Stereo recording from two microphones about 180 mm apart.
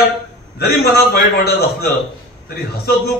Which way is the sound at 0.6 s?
60° left (ahead or behind).